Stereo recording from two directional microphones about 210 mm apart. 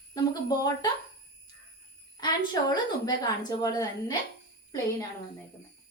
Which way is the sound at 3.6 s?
15° left (ahead or behind).